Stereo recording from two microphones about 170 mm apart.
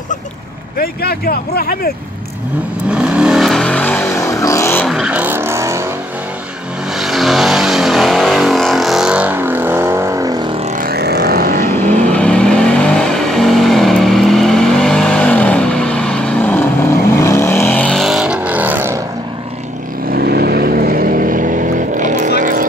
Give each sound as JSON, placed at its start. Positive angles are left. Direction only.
{"t": 0.7, "sound": "speech", "side_deg": 65}
{"t": 2.9, "sound": "vehicle", "side_deg": -5}
{"t": 4.1, "sound": "vehicle", "side_deg": 20}
{"t": 4.8, "sound": "vehicle", "side_deg": -5}
{"t": 7.0, "sound": "vehicle", "side_deg": 0}
{"t": 10.6, "sound": "vehicle", "side_deg": -45}
{"t": 10.9, "sound": "vehicle", "side_deg": -70}
{"t": 12.1, "sound": "vehicle", "side_deg": 5}
{"t": 20.1, "sound": "vehicle", "side_deg": -65}